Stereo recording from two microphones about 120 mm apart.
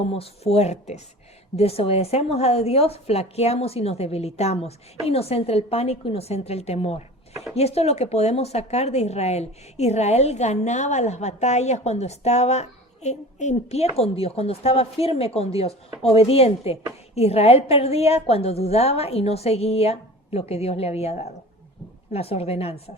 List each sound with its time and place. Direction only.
0.0 s speech: 55° left (ahead or behind)
1.5 s speech: 55° left (ahead or behind)